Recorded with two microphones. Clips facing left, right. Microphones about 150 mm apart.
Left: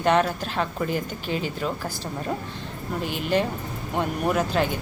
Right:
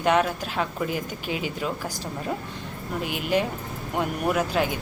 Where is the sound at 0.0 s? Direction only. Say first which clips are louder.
Left 1 dB; 5° right (ahead or behind).